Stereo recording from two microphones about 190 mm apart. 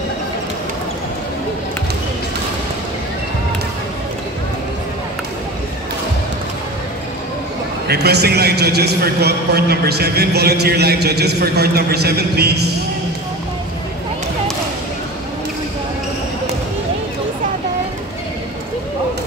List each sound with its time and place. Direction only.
7.9 s a man's voice: 60° right (ahead or behind)